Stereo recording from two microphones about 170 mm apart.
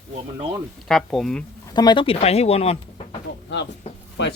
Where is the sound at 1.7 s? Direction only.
25° left (ahead or behind).